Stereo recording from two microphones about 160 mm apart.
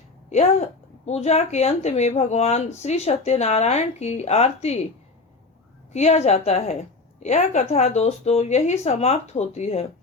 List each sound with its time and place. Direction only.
0.3 s a woman's voice: 45° left (ahead or behind)
5.9 s a woman's voice: 45° left (ahead or behind)